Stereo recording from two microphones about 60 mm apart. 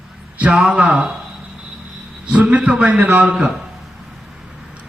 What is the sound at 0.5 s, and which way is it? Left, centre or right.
Speech, centre.